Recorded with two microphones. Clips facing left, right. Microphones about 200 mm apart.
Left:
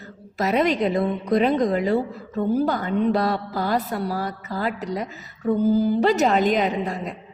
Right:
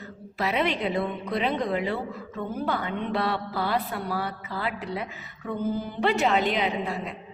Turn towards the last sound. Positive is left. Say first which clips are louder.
# left 4 dB
turn(degrees=45)  # may be behind; listen again after turning